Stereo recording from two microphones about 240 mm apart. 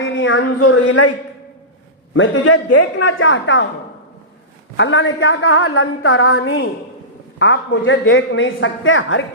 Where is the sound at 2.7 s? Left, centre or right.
Left.